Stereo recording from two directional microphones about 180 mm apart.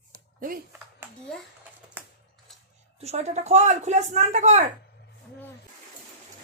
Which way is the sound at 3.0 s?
35° right (ahead or behind).